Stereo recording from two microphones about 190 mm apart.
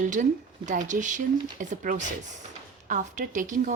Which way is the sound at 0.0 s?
40° right (ahead or behind).